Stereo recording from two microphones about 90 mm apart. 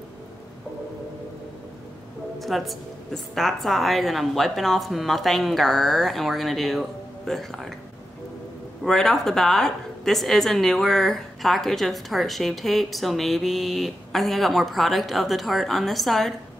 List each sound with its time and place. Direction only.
2.3 s a woman's voice: centre (ahead or behind)
8.8 s a woman's voice: 5° left (ahead or behind)